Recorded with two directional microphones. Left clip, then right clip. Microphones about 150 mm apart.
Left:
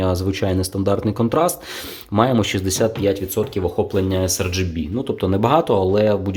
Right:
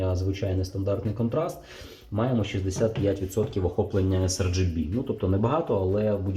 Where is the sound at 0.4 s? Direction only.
90° left.